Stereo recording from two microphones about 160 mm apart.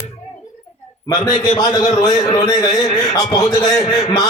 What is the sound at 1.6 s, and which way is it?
A man's voice, 25° left (ahead or behind).